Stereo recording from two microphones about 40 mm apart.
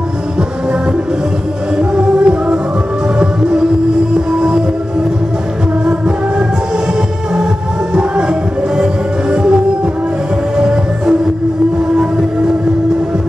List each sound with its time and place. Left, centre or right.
2.2 s music: right
5.9 s music: right
7.9 s music: right
10.6 s music: right